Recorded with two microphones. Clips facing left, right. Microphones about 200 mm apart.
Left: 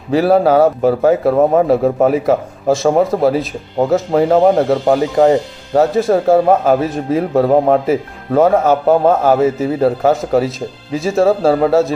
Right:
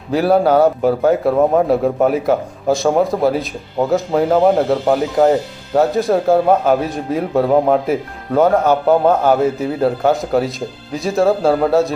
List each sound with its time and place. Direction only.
0.1 s speech: centre (ahead or behind)